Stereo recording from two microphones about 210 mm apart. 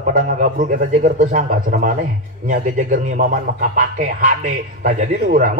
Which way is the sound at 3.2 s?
50° right (ahead or behind).